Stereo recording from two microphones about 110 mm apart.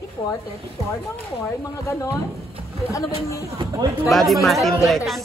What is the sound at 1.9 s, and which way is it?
Speech, 30° left (ahead or behind).